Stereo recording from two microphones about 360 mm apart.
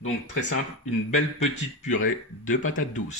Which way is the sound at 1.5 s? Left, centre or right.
Centre.